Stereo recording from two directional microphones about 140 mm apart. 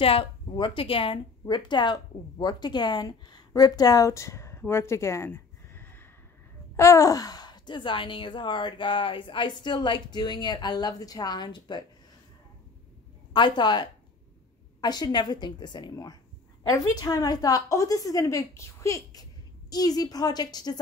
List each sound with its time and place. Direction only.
0.0 s speech: 40° left (ahead or behind)
13.3 s a woman's voice: 35° left (ahead or behind)